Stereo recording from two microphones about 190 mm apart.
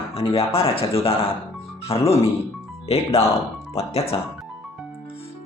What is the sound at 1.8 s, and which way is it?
Speech, 30° left (ahead or behind).